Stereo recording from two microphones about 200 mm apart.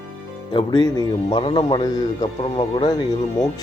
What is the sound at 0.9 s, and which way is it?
A man's voice, 25° left (ahead or behind).